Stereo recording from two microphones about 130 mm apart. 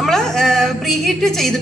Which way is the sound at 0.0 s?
5° left (ahead or behind).